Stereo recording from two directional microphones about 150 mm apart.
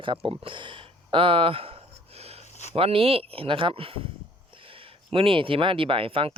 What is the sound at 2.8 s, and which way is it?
Speech, 40° right (ahead or behind).